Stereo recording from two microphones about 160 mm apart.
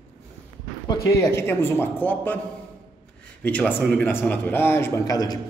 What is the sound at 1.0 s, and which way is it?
A man's voice, 15° left (ahead or behind).